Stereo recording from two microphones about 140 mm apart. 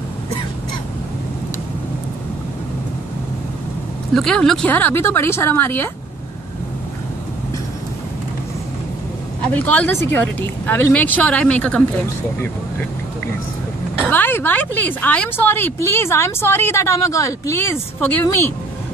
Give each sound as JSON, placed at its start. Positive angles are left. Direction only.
{"t": 4.1, "sound": "speech", "side_deg": 5}
{"t": 9.5, "sound": "speech", "side_deg": 10}
{"t": 14.1, "sound": "speech", "side_deg": 15}